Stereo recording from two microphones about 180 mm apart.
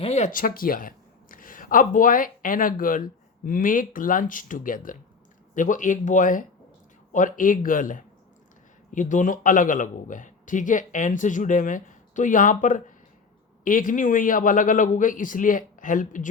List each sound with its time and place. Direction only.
0.0 s speech: 40° left (ahead or behind)